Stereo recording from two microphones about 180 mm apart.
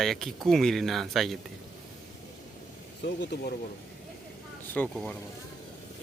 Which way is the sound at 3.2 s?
65° left (ahead or behind).